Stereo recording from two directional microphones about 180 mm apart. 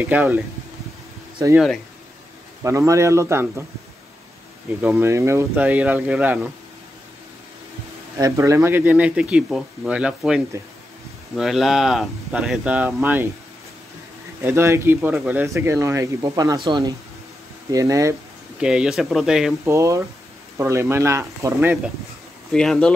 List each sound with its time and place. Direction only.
0.0 s speech: 10° right (ahead or behind)
2.6 s speech: 15° right (ahead or behind)
4.8 s speech: 10° right (ahead or behind)
8.2 s speech: 15° right (ahead or behind)
14.4 s speech: 15° right (ahead or behind)
18.6 s speech: 5° right (ahead or behind)
19.6 s speech: 15° right (ahead or behind)
22.5 s speech: 5° left (ahead or behind)